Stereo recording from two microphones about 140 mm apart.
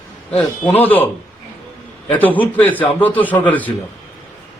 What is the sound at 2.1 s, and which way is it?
A man's voice, 10° left (ahead or behind).